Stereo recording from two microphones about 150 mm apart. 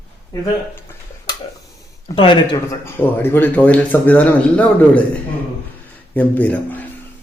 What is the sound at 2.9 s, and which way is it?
Speech, 15° left (ahead or behind).